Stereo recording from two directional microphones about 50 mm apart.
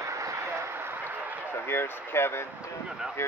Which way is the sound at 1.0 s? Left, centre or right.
Right.